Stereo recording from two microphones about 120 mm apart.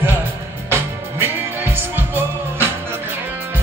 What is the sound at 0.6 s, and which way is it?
Music, 20° right (ahead or behind).